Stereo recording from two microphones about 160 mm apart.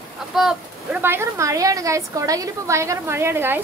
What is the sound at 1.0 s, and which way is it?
A woman's voice, 15° right (ahead or behind).